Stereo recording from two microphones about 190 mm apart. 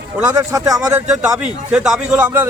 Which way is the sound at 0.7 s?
5° right (ahead or behind).